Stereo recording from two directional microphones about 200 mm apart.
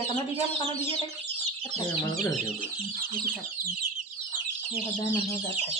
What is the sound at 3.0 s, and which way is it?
Speech, 45° right (ahead or behind).